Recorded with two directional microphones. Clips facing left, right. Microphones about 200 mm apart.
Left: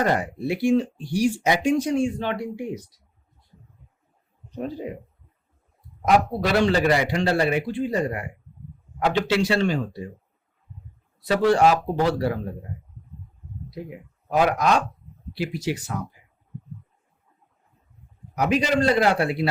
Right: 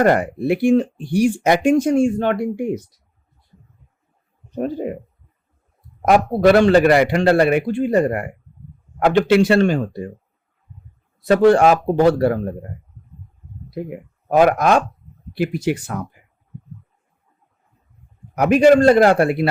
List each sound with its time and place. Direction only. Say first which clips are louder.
0.0 s speech: right 7 dB; 60° right (ahead or behind)
4.5 s speech: right 7 dB; 55° right (ahead or behind)
6.0 s a man's voice: right 5 dB; 55° right (ahead or behind)
11.2 s speech: right 6 dB; 50° right (ahead or behind)
13.7 s speech: right 8 dB; 55° right (ahead or behind)
18.3 s speech: right 10 dB; 55° right (ahead or behind)